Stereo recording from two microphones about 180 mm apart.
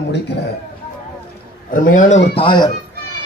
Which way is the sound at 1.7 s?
45° left (ahead or behind).